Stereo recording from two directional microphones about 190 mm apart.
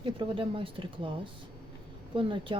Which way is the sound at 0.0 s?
25° right (ahead or behind).